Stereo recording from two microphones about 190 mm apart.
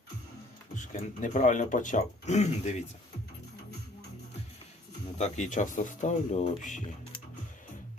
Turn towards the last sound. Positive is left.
turn(degrees=40)  # may be behind; listen again after turning